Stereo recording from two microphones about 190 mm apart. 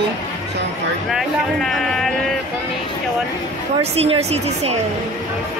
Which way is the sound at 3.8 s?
35° right (ahead or behind).